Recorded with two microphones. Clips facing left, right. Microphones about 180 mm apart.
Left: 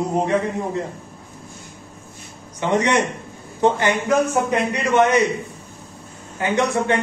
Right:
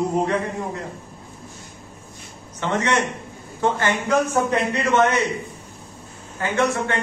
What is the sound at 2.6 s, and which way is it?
Speech, 15° left (ahead or behind).